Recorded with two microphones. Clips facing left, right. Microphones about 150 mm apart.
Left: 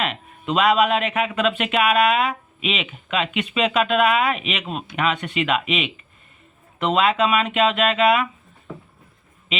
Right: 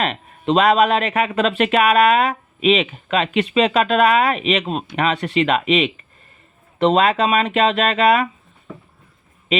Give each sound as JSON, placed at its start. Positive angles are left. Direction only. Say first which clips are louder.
{"t": 0.0, "sound": "speech", "louder": "right 4 dB", "side_deg": -35}